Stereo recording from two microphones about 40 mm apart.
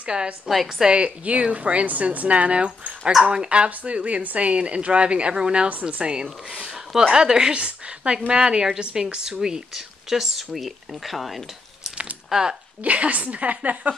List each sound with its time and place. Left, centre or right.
0.0 s a woman's voice: right
0.5 s a woman's voice: centre
0.8 s a woman's voice: right
5.7 s a woman's voice: right
6.5 s a woman's voice: centre
7.5 s a woman's voice: right; by 11.9 s centre
12.3 s speech: centre
12.8 s a woman's voice: right